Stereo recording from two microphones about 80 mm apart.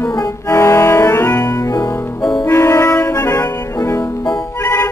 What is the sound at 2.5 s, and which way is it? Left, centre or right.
Music, left.